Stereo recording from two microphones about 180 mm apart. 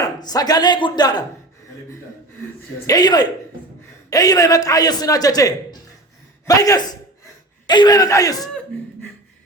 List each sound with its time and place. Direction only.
0.0 s a man's voice: 20° left (ahead or behind)
2.8 s a man's voice: 20° left (ahead or behind)